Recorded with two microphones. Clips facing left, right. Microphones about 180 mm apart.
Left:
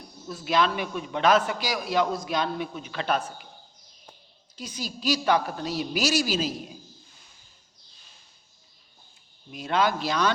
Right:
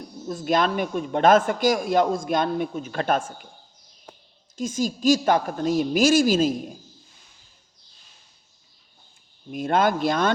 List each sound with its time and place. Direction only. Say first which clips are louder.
0.3 s a man's voice: right 3 dB; 45° right (ahead or behind)
4.5 s a man's voice: right 10 dB; 45° right (ahead or behind)
9.5 s a man's voice: right 4 dB; 50° right (ahead or behind)